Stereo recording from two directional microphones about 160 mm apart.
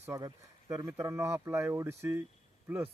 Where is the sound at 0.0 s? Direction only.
20° right (ahead or behind).